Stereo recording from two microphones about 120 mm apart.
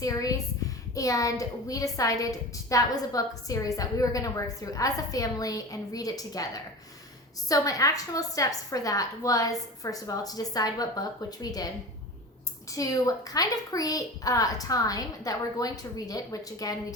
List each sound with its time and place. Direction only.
0.0 s a woman's voice: 30° left (ahead or behind)
12.7 s a child's voice: 30° left (ahead or behind)